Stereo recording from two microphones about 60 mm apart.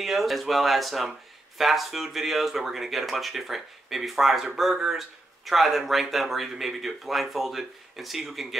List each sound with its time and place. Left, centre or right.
0.0 s speech: centre